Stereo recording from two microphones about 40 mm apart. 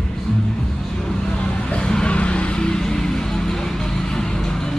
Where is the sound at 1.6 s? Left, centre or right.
Left.